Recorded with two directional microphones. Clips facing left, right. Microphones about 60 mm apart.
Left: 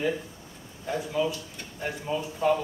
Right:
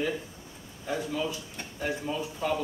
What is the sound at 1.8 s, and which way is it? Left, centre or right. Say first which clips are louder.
Speech: left 1 dB; centre.